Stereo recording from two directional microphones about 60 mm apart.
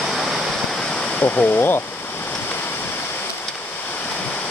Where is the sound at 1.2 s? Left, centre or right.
Left.